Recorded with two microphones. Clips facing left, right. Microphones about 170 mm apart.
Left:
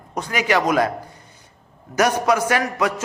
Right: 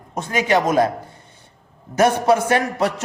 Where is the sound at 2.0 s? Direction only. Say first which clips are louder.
Right 2 dB; 25° right (ahead or behind).